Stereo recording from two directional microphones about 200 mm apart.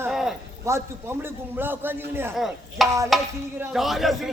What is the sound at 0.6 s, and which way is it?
A man's voice, 15° right (ahead or behind).